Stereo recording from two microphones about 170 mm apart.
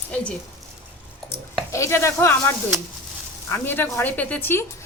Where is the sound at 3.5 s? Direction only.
15° left (ahead or behind).